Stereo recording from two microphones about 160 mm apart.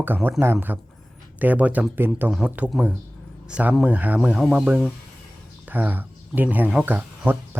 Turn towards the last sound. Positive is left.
turn(degrees=-10)  # may be behind; listen again after turning